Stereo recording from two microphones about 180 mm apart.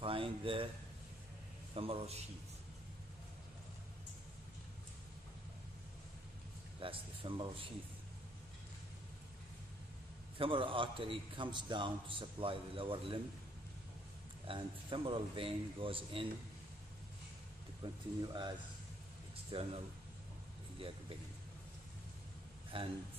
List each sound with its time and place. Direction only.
0.0 s a sound: 30° right (ahead or behind)
1.8 s a man's voice: 30° right (ahead or behind)
6.8 s speech: 30° right (ahead or behind)
10.3 s a man's voice: 30° right (ahead or behind)
14.5 s a man's voice: 30° right (ahead or behind)
17.8 s a man's voice: 25° right (ahead or behind)
19.5 s a man's voice: 30° right (ahead or behind)
22.7 s a man's voice: 30° right (ahead or behind)